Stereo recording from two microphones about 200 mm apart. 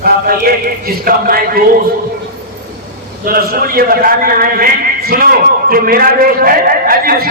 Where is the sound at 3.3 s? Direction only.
45° right (ahead or behind).